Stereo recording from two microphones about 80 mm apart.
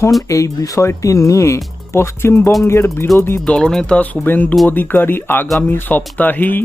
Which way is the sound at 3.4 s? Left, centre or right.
Centre.